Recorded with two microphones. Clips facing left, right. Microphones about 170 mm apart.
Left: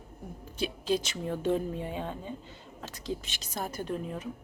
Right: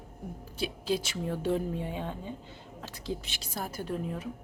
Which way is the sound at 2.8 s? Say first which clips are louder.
Left 1 dB; 15° right (ahead or behind).